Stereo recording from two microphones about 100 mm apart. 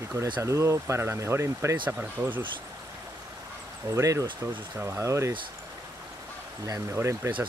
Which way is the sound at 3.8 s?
30° right (ahead or behind).